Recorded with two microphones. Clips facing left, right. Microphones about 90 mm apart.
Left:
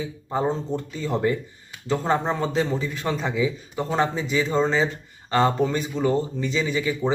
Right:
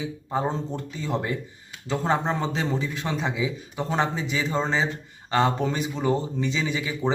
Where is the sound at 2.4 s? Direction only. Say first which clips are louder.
Left 3 dB; 20° right (ahead or behind).